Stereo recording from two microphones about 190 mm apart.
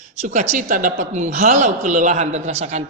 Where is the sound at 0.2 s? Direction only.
40° right (ahead or behind).